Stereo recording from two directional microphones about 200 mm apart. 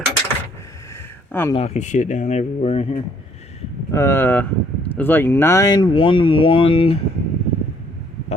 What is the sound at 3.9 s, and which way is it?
Speech, 15° left (ahead or behind).